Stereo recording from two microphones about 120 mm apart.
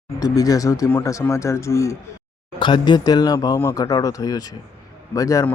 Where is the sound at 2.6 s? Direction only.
40° left (ahead or behind).